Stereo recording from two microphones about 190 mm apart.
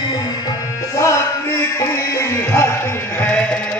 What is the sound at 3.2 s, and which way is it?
Sheep, 5° left (ahead or behind).